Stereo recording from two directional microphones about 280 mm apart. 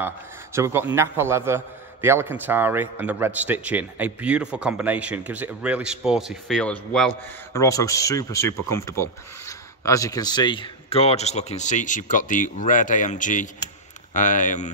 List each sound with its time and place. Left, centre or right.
0.0 s a man's voice: centre; by 14.7 s left